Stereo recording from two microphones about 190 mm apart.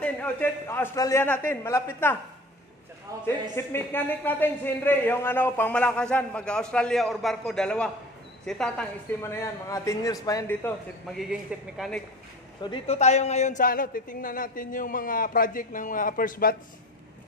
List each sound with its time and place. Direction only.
0.0 s a man's voice: 10° left (ahead or behind)
3.5 s a man's voice: 10° left (ahead or behind)
11.5 s speech: 5° right (ahead or behind)
12.6 s a woman's voice: 35° left (ahead or behind); by 16.5 s 50° left (ahead or behind)